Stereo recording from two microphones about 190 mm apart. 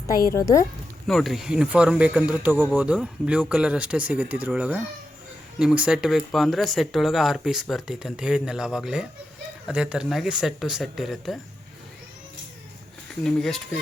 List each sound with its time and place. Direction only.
0.3 s speech: 15° left (ahead or behind)
1.0 s speech: centre (ahead or behind)
13.2 s speech: 5° left (ahead or behind)